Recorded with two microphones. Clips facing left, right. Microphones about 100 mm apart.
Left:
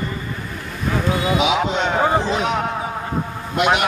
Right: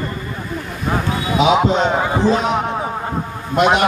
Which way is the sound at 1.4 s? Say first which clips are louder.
Right 5 dB; 35° right (ahead or behind).